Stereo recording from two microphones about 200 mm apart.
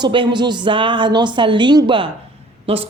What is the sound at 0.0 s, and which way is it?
A woman's voice, 25° right (ahead or behind).